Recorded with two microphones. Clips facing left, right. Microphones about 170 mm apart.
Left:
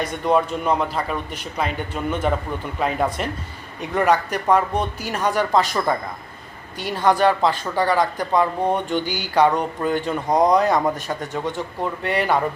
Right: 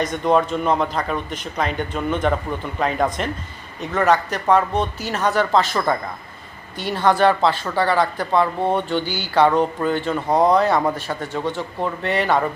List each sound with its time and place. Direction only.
0.0 s speech: 5° left (ahead or behind)